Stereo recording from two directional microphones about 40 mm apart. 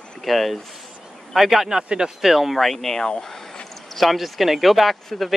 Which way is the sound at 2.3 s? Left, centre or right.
Centre.